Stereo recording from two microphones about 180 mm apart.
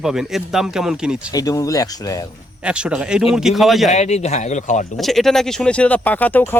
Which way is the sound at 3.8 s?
40° left (ahead or behind).